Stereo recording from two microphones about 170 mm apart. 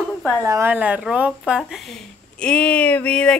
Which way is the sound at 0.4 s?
15° right (ahead or behind).